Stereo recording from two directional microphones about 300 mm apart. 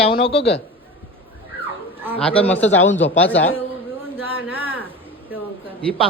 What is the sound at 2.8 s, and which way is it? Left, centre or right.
Speech, left.